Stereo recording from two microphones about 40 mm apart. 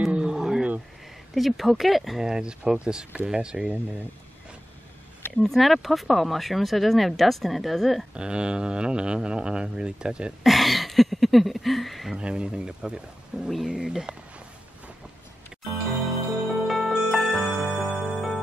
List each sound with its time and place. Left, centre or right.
0.1 s roaring cats: centre
1.3 s speech: centre
2.2 s speech: centre
5.5 s speech: centre
8.1 s speech: right
10.4 s speech: centre
12.2 s speech: right
15.6 s music: centre